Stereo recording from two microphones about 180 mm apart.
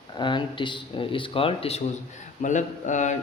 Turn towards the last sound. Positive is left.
turn(degrees=45)  # may be behind; listen again after turning